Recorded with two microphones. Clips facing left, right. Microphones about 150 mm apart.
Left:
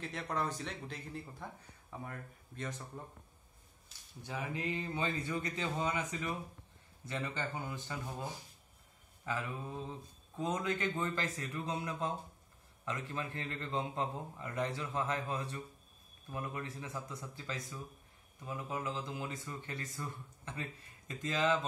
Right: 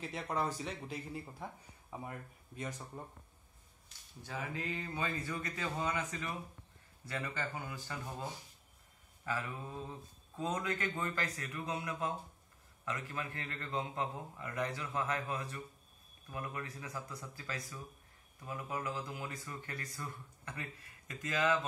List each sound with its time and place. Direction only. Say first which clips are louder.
0.0 s speech: right 1 dB; 5° right (ahead or behind)
4.2 s speech: left 2 dB; 20° left (ahead or behind)
9.2 s speech: left 1 dB; 15° left (ahead or behind)